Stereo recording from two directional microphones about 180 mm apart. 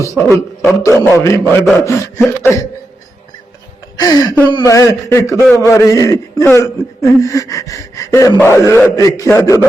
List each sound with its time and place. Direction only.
0.0 s a man's voice: 15° left (ahead or behind)
3.9 s a man's voice: 20° left (ahead or behind)